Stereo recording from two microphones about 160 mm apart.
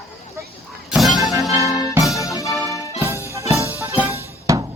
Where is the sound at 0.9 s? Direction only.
Centre (ahead or behind).